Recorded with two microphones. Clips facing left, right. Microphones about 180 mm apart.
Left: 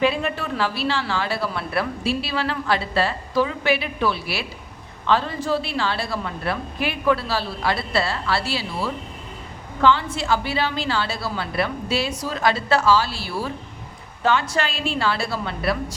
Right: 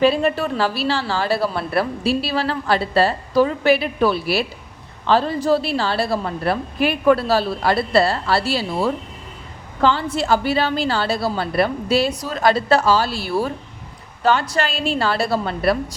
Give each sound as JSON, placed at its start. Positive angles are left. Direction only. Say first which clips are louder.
{"t": 0.0, "sound": "speech", "louder": "right 5 dB", "side_deg": -35}